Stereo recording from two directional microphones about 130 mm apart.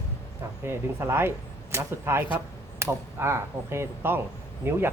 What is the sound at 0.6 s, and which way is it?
A man's voice, 20° right (ahead or behind).